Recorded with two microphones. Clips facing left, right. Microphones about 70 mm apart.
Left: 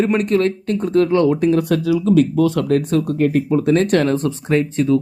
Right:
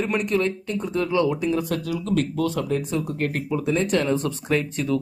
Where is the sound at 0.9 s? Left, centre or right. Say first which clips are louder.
Left 7 dB; left.